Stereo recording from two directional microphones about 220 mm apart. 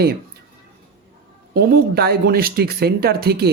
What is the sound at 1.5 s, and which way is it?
Speech, 45° right (ahead or behind).